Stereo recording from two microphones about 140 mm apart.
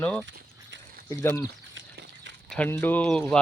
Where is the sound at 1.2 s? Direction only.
20° left (ahead or behind).